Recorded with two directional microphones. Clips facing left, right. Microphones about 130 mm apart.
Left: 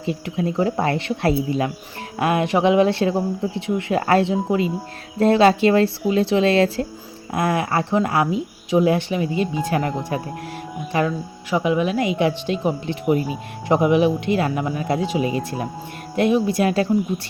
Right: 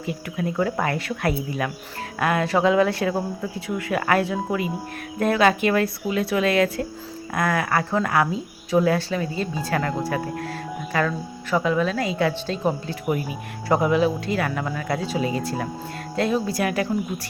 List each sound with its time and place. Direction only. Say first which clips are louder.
0.0 s speech: left 4 dB; 25° left (ahead or behind)